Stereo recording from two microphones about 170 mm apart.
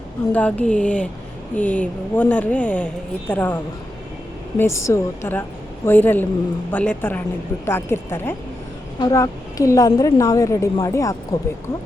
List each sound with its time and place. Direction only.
0.3 s a woman's voice: 10° left (ahead or behind)